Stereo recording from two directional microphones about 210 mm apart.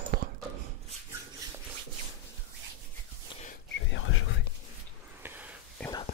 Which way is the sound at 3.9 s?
70° left (ahead or behind).